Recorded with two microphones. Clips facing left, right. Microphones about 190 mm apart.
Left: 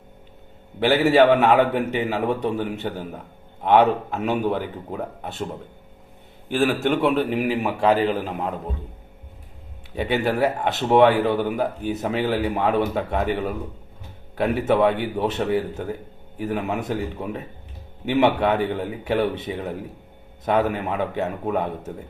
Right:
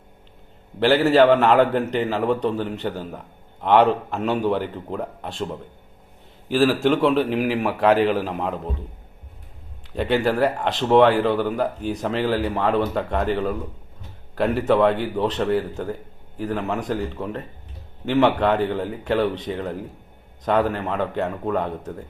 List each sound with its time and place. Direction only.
0.9 s a man's voice: 10° left (ahead or behind)
6.7 s a man's voice: centre (ahead or behind)
9.9 s a man's voice: centre (ahead or behind)